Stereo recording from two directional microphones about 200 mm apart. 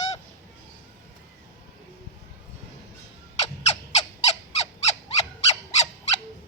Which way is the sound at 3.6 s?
30° left (ahead or behind).